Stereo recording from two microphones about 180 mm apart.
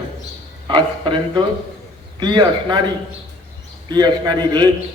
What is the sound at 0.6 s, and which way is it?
A man's voice, 25° right (ahead or behind).